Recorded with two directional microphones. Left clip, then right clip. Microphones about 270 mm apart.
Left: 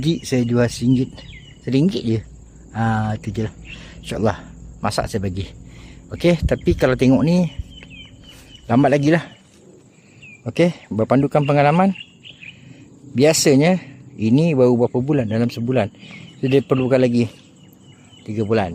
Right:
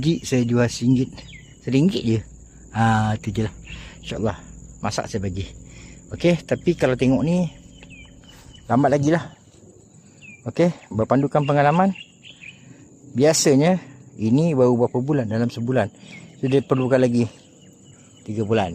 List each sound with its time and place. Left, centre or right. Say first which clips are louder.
0.0 s speech: left 1 dB; centre
10.4 s speech: left 2 dB; centre
11.9 s a sound: left 3 dB; centre
13.1 s speech: left 2 dB; centre